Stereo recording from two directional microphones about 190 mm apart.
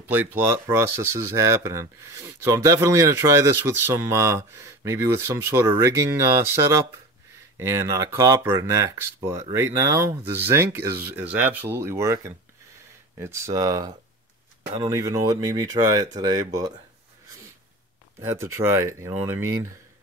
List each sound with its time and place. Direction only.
0.1 s speech: 10° right (ahead or behind)
18.2 s speech: 15° right (ahead or behind)